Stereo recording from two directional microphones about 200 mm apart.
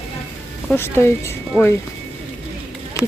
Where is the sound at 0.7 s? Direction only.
10° left (ahead or behind).